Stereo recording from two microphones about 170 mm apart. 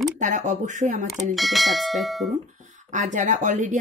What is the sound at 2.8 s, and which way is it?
Speech, 45° right (ahead or behind).